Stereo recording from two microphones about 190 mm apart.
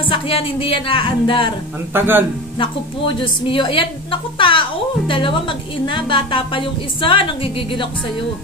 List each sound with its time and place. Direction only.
0.1 s a child's voice: 25° left (ahead or behind)
2.0 s a man's voice: 10° right (ahead or behind)
3.2 s a child's voice: 25° left (ahead or behind)